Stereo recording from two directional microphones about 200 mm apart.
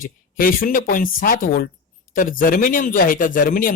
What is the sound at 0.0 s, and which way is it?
A man's voice, 45° left (ahead or behind).